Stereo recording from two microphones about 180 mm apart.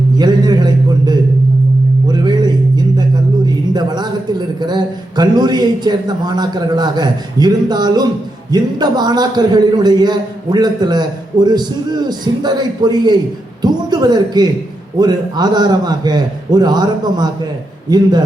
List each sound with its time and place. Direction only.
0.2 s a man's voice: 25° right (ahead or behind)